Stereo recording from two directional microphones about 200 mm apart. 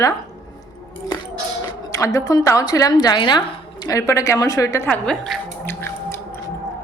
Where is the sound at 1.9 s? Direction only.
15° left (ahead or behind).